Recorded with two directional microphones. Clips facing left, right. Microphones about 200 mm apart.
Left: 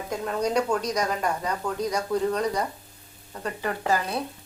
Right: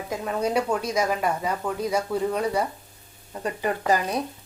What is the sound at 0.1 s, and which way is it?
Speech, 5° right (ahead or behind).